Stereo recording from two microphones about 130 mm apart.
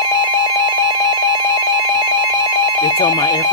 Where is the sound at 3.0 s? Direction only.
35° left (ahead or behind).